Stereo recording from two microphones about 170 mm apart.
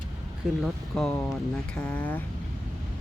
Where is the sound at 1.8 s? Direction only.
10° left (ahead or behind).